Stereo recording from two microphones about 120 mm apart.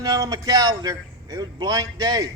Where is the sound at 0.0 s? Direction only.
30° right (ahead or behind).